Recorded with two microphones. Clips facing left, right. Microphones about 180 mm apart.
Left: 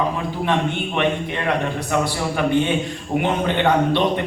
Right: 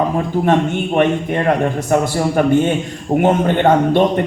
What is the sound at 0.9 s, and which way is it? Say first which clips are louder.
A man's voice: right 8 dB; 45° right (ahead or behind).